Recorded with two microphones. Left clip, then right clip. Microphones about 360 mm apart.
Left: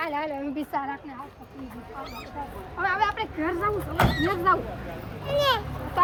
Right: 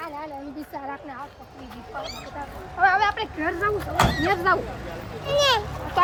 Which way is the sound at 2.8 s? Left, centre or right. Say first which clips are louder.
Right 5 dB; centre.